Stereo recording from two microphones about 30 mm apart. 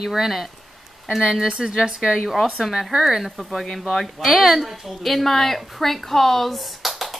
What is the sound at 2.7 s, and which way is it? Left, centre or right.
Speech, centre.